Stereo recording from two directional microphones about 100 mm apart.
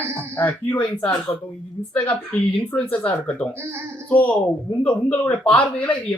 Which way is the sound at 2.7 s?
15° left (ahead or behind).